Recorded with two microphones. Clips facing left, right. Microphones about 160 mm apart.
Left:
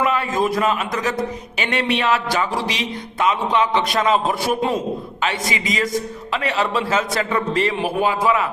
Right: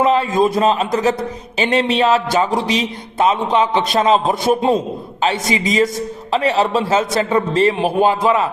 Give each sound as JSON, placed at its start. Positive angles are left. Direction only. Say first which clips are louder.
{"t": 0.0, "sound": "a man's voice", "louder": "right 5 dB", "side_deg": -25}